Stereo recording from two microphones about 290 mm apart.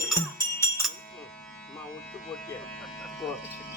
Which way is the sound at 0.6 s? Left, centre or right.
Centre.